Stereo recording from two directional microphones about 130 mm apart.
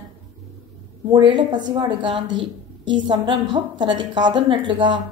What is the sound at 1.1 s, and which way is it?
A woman's voice, 35° right (ahead or behind).